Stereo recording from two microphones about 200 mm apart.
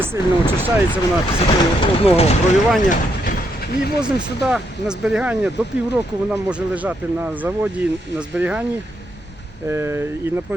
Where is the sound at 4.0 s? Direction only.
5° right (ahead or behind).